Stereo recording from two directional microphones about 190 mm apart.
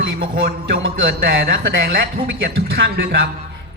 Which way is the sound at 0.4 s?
60° right (ahead or behind).